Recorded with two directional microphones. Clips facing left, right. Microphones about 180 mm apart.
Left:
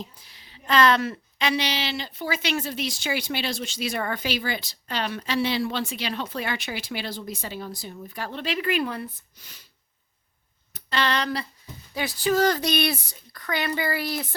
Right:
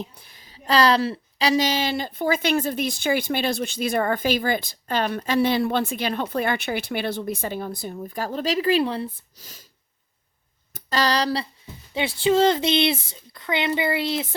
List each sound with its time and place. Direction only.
0.0 s a woman's voice: 55° right (ahead or behind)
10.8 s a sound: 40° right (ahead or behind)
11.9 s speech: 25° right (ahead or behind)